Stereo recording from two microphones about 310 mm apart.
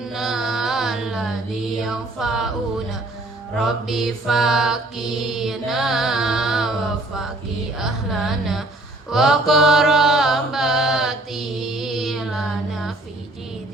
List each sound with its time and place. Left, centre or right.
0.0 s carnatic music: centre
1.8 s a sound: centre
3.7 s music: centre
7.8 s speech: centre
9.0 s mantra: centre